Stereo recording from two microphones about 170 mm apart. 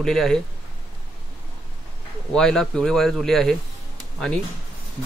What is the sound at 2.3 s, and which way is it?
A man's voice, 5° left (ahead or behind).